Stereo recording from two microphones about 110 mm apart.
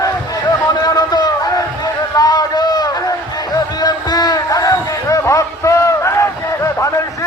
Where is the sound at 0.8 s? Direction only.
35° left (ahead or behind).